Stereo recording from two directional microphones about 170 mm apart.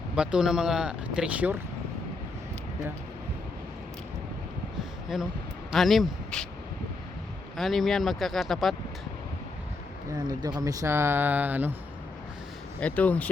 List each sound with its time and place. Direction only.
0.2 s speech: 5° right (ahead or behind)
5.0 s speech: 5° right (ahead or behind)
7.5 s speech: centre (ahead or behind)
10.1 s speech: 25° right (ahead or behind)
12.8 s speech: 10° left (ahead or behind)